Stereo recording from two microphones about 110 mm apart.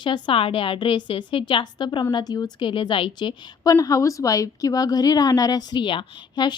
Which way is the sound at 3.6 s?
30° left (ahead or behind).